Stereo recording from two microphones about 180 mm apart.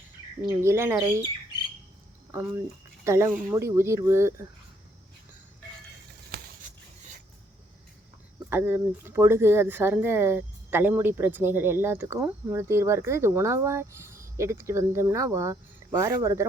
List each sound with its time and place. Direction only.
0.6 s speech: 15° right (ahead or behind)
2.3 s speech: 15° right (ahead or behind)
8.4 s speech: 15° right (ahead or behind)